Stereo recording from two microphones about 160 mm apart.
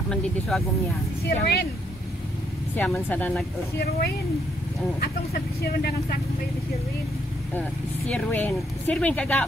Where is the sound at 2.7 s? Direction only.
10° left (ahead or behind).